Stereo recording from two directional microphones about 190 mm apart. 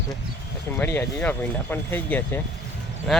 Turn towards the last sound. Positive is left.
turn(degrees=0)  # may be behind; listen again after turning